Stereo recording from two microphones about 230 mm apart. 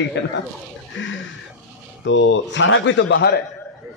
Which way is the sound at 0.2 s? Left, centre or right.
Left.